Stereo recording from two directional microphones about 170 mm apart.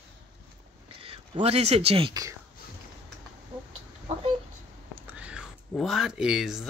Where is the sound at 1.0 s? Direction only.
35° right (ahead or behind).